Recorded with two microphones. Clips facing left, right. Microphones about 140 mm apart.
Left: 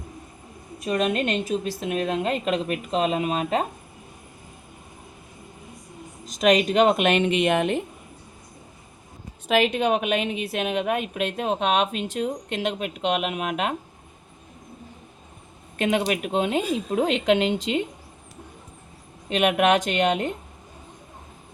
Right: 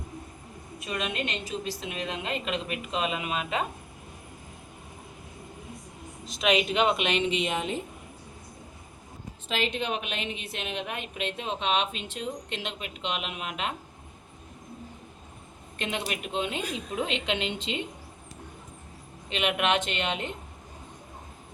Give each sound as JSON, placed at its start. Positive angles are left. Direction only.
{"t": 0.8, "sound": "a woman's voice", "side_deg": 45}
{"t": 6.2, "sound": "a woman's voice", "side_deg": 45}
{"t": 9.7, "sound": "a woman's voice", "side_deg": 55}
{"t": 15.8, "sound": "a woman's voice", "side_deg": 50}
{"t": 19.3, "sound": "a woman's voice", "side_deg": 45}